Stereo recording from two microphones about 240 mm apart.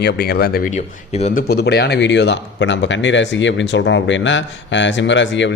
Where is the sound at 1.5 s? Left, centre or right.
Left.